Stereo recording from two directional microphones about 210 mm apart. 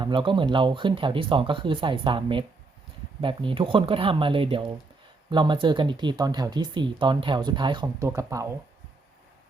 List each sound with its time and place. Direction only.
0.0 s speech: 25° right (ahead or behind)